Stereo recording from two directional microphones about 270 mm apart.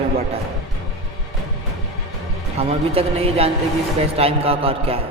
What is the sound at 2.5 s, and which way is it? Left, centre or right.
A man's voice, right.